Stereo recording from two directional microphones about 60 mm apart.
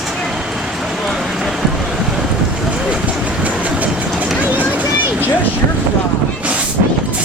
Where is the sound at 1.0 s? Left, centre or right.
Centre.